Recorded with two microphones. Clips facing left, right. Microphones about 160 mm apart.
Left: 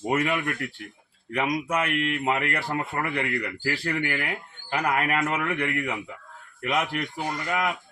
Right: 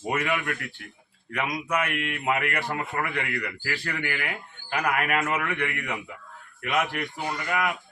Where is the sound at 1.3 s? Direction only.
30° left (ahead or behind).